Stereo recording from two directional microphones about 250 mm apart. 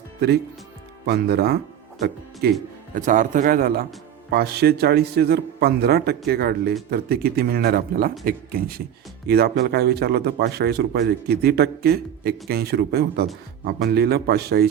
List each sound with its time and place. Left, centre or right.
1.0 s a man's voice: right